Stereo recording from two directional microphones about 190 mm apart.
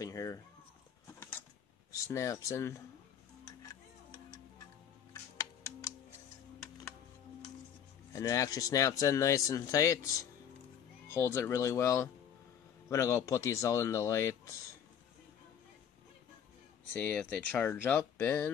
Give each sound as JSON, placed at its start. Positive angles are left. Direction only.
{"t": 0.0, "sound": "a sound", "side_deg": 20}
{"t": 1.9, "sound": "speech", "side_deg": 15}
{"t": 5.1, "sound": "music", "side_deg": 15}
{"t": 8.1, "sound": "speech", "side_deg": 15}
{"t": 16.9, "sound": "speech", "side_deg": 10}